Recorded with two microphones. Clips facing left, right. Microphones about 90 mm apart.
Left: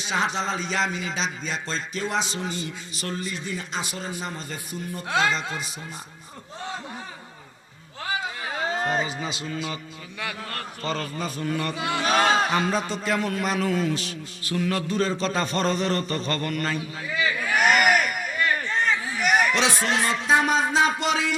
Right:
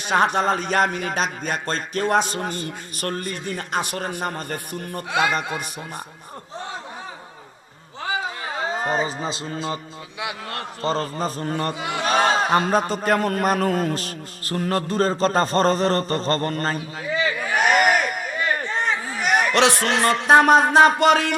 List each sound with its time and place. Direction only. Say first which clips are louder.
0.0 s speech: right 7 dB; 55° right (ahead or behind)
8.6 s a sound: right 1 dB; 5° right (ahead or behind)
8.9 s a man's voice: right 3 dB; 35° right (ahead or behind)
11.7 s speech: even; 25° right (ahead or behind)
12.0 s speech: right 2 dB; centre (ahead or behind)
12.5 s a man's voice: right 5 dB; 40° right (ahead or behind)
17.5 s crowd: right 1 dB; centre (ahead or behind)
17.7 s a sound: right 2 dB; 35° right (ahead or behind)
19.4 s speech: right 4 dB; 65° right (ahead or behind)